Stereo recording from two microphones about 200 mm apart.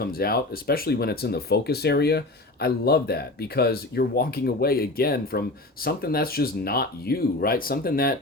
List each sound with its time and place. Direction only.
0.0 s speech: 50° left (ahead or behind)